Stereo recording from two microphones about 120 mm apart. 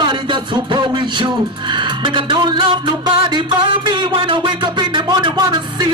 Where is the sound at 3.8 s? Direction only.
40° right (ahead or behind).